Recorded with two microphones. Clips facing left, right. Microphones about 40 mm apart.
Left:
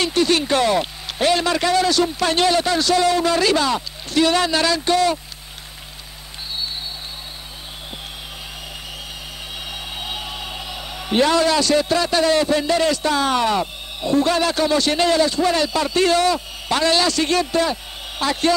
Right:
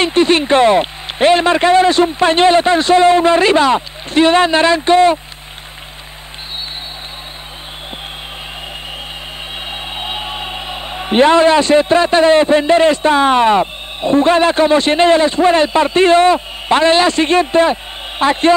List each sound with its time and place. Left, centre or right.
0.0 s a man's voice: right
9.7 s a man's voice: right